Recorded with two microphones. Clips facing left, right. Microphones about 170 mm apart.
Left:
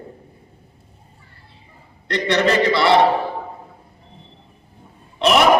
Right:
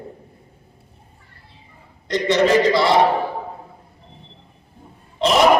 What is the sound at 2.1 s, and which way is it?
Speech, 65° left (ahead or behind).